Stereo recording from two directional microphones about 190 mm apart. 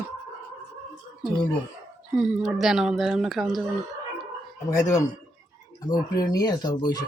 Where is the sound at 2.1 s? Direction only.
Centre (ahead or behind).